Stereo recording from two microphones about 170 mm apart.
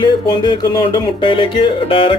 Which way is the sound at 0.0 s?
25° left (ahead or behind).